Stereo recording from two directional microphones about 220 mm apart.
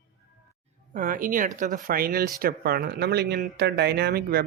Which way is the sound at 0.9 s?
40° right (ahead or behind).